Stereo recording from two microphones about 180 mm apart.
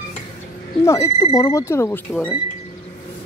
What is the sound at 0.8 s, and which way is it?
Speech, 15° left (ahead or behind).